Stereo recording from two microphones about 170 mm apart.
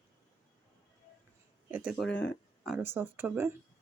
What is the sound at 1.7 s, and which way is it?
Speech, 10° right (ahead or behind).